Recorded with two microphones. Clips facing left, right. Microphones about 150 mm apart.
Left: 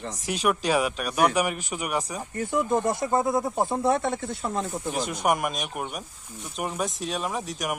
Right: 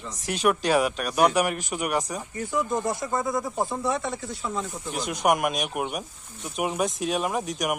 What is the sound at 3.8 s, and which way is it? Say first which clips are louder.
Speech: left 4 dB; 55° left (ahead or behind).